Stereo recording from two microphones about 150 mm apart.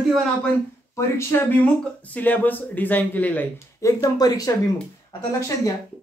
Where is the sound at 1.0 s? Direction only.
15° left (ahead or behind).